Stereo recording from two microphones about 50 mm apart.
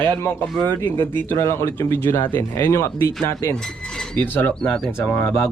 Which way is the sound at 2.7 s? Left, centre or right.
Left.